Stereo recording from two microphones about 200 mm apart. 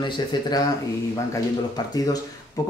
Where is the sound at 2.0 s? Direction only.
20° left (ahead or behind).